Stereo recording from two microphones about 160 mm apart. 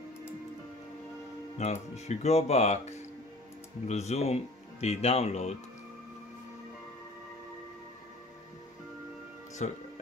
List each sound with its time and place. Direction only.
1.6 s speech: 45° left (ahead or behind)
9.6 s speech: 45° left (ahead or behind)